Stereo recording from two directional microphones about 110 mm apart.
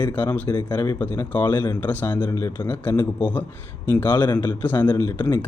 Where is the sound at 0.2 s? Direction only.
15° left (ahead or behind).